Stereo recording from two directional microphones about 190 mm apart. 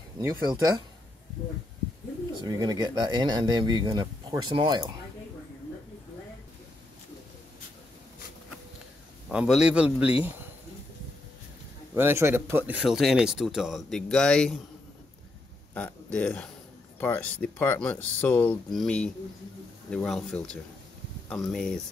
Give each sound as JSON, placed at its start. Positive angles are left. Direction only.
{"t": 0.2, "sound": "speech", "side_deg": -20}
{"t": 2.4, "sound": "speech", "side_deg": -20}
{"t": 9.3, "sound": "a man's voice", "side_deg": -5}
{"t": 11.9, "sound": "speech", "side_deg": -15}
{"t": 15.7, "sound": "a man's voice", "side_deg": 5}